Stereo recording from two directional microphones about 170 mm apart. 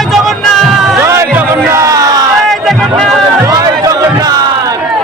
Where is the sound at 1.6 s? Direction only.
15° right (ahead or behind).